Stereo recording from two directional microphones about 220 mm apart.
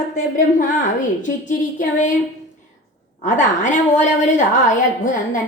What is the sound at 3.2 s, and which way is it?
A woman's voice, 35° left (ahead or behind).